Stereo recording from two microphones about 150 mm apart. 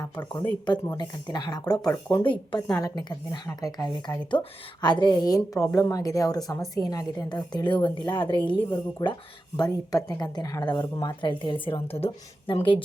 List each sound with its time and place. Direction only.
0.0 s a woman's voice: 25° left (ahead or behind)